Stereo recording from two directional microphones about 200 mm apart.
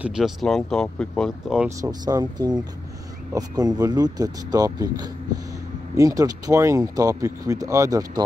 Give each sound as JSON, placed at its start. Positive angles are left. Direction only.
{"t": 0.0, "sound": "speech", "side_deg": -5}
{"t": 1.8, "sound": "speech", "side_deg": -20}